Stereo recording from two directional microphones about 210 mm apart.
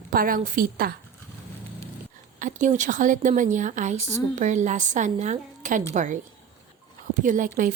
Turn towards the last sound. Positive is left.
turn(degrees=-40)  # may be behind; listen again after turning